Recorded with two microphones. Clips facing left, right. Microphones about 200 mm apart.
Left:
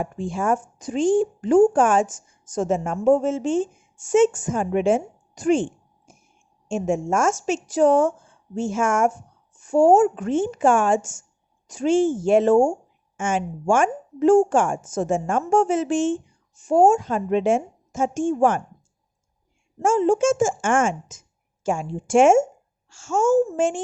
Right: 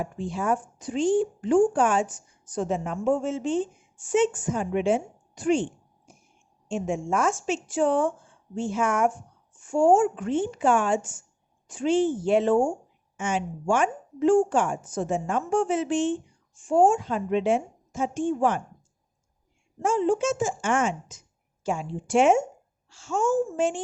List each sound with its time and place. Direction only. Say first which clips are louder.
0.0 s a woman's voice: left 4 dB; 50° left (ahead or behind)
6.7 s a woman's voice: left 4 dB; 45° left (ahead or behind)
19.8 s a woman's voice: left 5 dB; 45° left (ahead or behind)